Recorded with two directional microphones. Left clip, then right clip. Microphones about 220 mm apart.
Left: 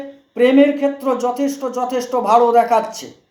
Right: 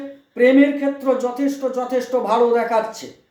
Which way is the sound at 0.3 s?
15° left (ahead or behind).